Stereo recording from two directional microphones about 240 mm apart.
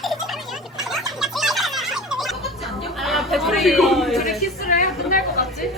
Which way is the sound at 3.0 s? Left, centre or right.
Centre.